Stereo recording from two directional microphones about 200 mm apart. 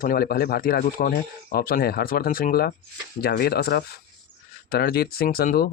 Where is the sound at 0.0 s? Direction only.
45° left (ahead or behind).